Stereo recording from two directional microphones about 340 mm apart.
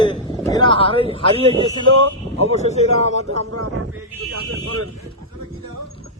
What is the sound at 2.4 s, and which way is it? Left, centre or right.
A man's voice, centre.